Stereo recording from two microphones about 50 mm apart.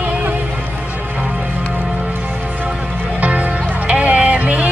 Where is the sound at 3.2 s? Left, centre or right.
Right.